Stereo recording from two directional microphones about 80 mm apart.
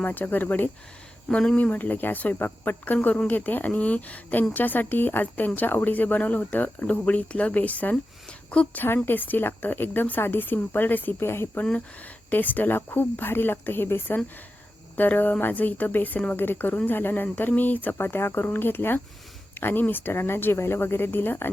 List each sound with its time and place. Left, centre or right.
0.0 s speech: left
11.6 s speech: centre